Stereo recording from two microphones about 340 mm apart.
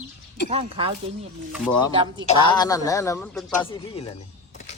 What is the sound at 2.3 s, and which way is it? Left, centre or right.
A man's voice, centre.